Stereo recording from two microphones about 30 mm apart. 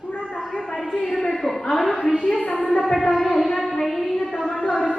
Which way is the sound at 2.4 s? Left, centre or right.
Left.